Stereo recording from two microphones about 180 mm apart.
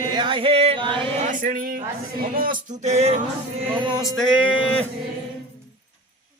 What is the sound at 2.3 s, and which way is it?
Music, 50° right (ahead or behind).